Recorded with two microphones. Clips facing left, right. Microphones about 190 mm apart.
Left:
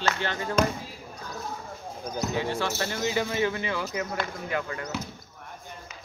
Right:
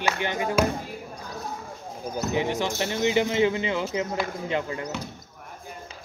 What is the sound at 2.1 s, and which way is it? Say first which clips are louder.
Speech: right 3 dB; 20° right (ahead or behind).